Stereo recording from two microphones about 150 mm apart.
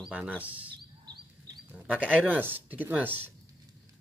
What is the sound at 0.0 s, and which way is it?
Speech, 5° right (ahead or behind).